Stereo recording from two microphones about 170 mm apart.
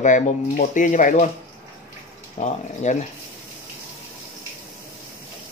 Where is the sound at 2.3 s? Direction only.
45° left (ahead or behind).